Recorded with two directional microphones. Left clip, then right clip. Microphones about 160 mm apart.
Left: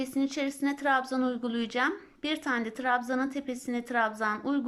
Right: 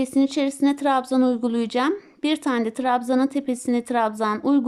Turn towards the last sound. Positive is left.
turn(degrees=-30)  # may be behind; listen again after turning